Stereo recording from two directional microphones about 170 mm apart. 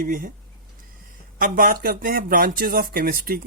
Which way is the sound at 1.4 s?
55° right (ahead or behind).